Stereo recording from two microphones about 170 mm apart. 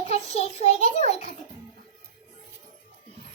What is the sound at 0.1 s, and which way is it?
A child's voice, 40° left (ahead or behind).